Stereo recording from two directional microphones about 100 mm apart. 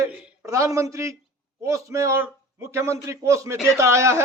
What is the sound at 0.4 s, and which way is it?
A man's voice, 30° right (ahead or behind).